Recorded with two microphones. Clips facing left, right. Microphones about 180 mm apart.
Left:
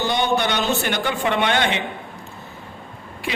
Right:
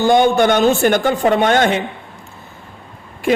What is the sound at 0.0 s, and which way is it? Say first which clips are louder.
A man's voice: right 9 dB; 45° right (ahead or behind).